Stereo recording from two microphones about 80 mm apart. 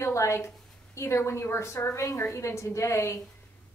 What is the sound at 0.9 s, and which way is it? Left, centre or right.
A woman's voice, left.